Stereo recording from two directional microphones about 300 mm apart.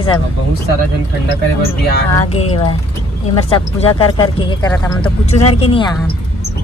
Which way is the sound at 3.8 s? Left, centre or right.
Centre.